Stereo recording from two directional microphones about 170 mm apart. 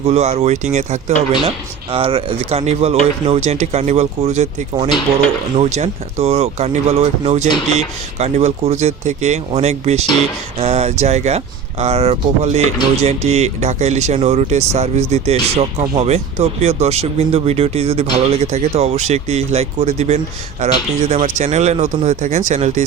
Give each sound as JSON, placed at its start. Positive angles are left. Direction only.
{"t": 0.0, "sound": "speech", "side_deg": -40}